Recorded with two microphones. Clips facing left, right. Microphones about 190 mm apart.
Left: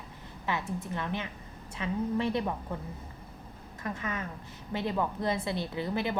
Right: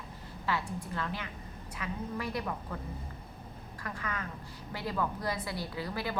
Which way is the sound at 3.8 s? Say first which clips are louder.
Left 4 dB; 20° left (ahead or behind).